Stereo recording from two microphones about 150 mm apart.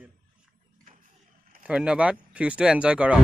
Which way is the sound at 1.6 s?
5° right (ahead or behind).